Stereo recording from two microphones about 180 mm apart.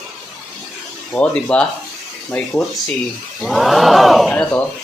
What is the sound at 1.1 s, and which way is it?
Speech, 5° left (ahead or behind).